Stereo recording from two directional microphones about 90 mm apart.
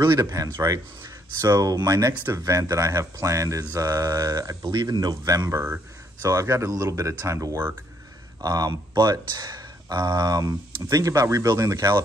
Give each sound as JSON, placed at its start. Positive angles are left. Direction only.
{"t": 0.0, "sound": "speech", "side_deg": -35}
{"t": 4.6, "sound": "speech", "side_deg": -50}